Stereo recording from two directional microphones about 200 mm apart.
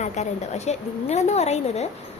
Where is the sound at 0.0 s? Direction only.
35° left (ahead or behind).